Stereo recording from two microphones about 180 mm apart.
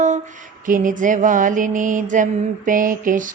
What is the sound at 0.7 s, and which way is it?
Mantra, 45° right (ahead or behind).